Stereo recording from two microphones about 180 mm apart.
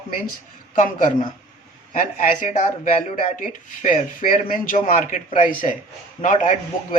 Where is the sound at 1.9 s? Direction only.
50° left (ahead or behind).